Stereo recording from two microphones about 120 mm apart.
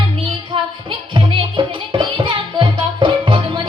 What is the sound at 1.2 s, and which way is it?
Music, 45° right (ahead or behind).